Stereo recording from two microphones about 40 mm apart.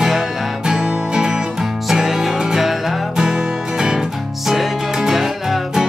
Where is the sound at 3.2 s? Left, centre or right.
Centre.